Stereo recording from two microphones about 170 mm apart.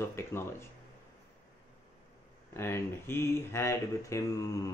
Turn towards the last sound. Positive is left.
turn(degrees=20)  # may be behind; listen again after turning